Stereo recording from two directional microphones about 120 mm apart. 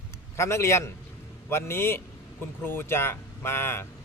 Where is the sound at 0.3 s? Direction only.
25° left (ahead or behind).